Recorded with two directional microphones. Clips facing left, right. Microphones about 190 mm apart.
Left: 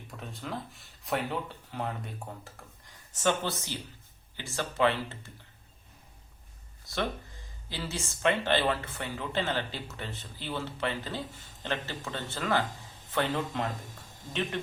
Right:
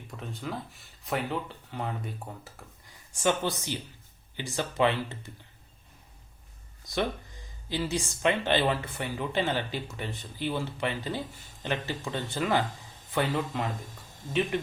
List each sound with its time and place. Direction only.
0.2 s speech: centre (ahead or behind); by 5.1 s 15° right (ahead or behind)
7.7 s speech: 15° right (ahead or behind)